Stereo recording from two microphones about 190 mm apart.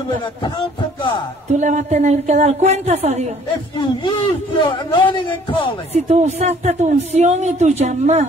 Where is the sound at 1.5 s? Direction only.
40° right (ahead or behind).